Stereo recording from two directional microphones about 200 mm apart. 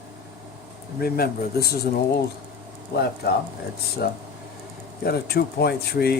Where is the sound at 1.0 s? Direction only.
50° left (ahead or behind).